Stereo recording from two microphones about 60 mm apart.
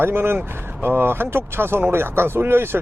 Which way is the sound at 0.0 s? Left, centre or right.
Right.